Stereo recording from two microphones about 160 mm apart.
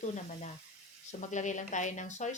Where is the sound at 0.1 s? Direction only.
50° left (ahead or behind).